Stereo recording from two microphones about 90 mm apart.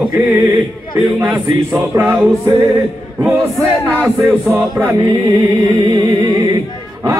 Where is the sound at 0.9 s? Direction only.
20° right (ahead or behind).